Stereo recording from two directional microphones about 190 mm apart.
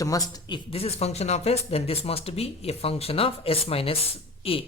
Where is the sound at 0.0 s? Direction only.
20° left (ahead or behind).